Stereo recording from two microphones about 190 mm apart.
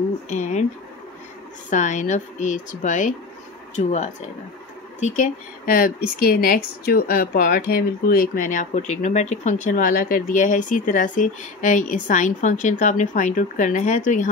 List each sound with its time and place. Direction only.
0.3 s speech: 40° left (ahead or behind)
1.7 s speech: 40° left (ahead or behind)